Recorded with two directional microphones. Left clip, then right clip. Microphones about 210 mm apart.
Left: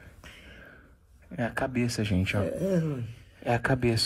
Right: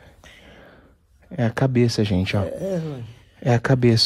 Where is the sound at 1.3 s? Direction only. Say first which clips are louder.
Right 8 dB; 55° right (ahead or behind).